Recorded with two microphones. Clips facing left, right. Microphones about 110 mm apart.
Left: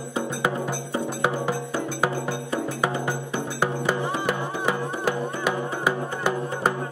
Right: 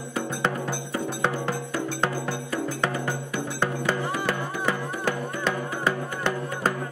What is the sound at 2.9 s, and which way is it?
Music, 20° left (ahead or behind).